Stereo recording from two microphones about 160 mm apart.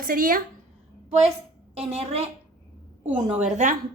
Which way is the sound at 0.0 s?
65° right (ahead or behind).